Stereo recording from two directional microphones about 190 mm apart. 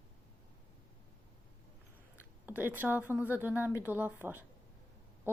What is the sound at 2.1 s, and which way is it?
A woman's voice, 10° right (ahead or behind).